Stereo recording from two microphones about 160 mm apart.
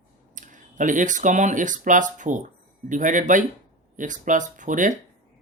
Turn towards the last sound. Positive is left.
turn(degrees=-55)  # may be behind; listen again after turning